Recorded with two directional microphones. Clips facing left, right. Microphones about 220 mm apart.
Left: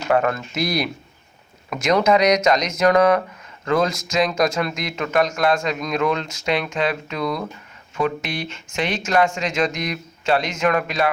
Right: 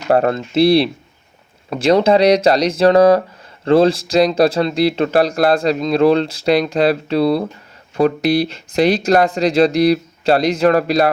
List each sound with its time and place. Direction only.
0.1 s speech: 35° right (ahead or behind)